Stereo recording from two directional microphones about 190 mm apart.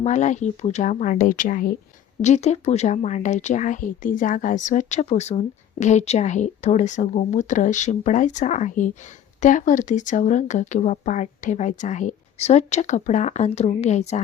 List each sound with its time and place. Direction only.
0.0 s a woman's voice: 40° left (ahead or behind)